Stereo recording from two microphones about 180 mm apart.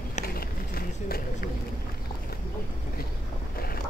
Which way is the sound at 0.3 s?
55° left (ahead or behind).